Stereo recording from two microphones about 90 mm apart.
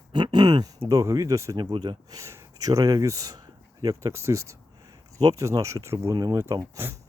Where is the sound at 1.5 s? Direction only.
60° right (ahead or behind).